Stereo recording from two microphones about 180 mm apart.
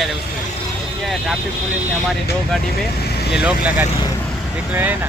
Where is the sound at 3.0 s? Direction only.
65° left (ahead or behind).